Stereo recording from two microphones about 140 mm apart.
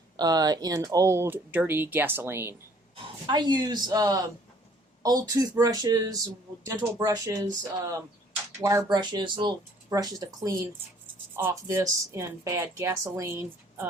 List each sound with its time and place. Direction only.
0.2 s speech: 30° right (ahead or behind)
3.2 s speech: 30° right (ahead or behind)
8.6 s speech: 25° right (ahead or behind)